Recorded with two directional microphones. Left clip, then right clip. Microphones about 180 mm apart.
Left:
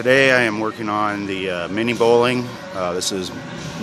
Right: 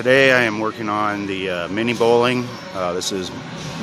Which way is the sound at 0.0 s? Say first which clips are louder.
Even; centre (ahead or behind).